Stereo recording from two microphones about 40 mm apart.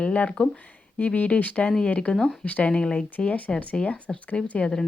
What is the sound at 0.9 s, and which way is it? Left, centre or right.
Speech, left.